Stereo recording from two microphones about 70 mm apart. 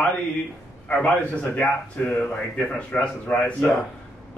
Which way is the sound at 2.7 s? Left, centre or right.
Left.